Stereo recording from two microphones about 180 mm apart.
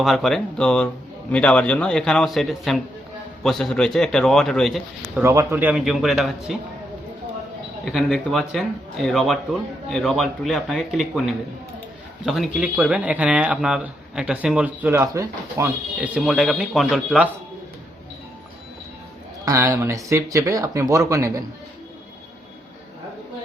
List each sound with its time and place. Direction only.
0.0 s speech: centre (ahead or behind)
5.2 s speech: 15° right (ahead or behind); by 6.6 s centre (ahead or behind)
7.9 s speech: centre (ahead or behind)
19.5 s speech: 15° right (ahead or behind)